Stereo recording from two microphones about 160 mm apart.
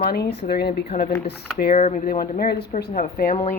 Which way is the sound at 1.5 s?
60° left (ahead or behind).